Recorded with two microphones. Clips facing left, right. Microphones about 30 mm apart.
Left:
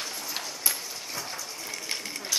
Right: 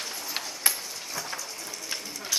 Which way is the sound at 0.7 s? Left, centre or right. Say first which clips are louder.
Right 4 dB; right.